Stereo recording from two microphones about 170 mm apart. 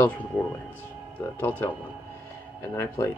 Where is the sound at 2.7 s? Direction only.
15° left (ahead or behind).